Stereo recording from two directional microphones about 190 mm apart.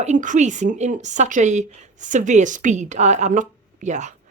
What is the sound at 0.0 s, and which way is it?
Speech, 40° right (ahead or behind).